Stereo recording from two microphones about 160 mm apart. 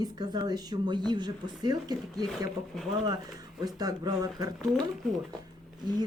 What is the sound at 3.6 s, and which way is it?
Speech, 25° right (ahead or behind).